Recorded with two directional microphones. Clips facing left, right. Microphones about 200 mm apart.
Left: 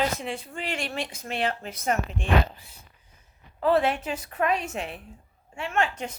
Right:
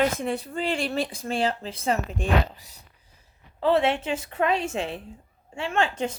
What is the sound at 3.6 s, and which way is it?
A woman's voice, 25° right (ahead or behind).